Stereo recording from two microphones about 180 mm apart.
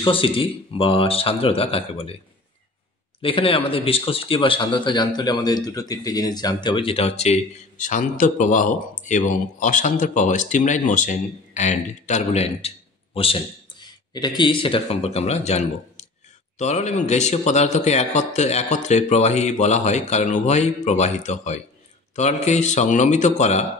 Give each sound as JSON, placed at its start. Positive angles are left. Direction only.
{"t": 0.0, "sound": "speech", "side_deg": 30}
{"t": 3.2, "sound": "speech", "side_deg": 30}